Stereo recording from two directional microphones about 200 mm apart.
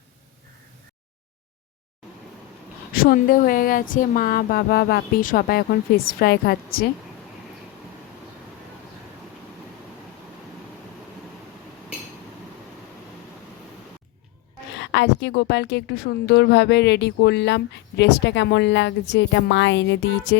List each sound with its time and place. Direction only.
2.9 s speech: 45° left (ahead or behind)
14.8 s a woman's voice: 60° left (ahead or behind)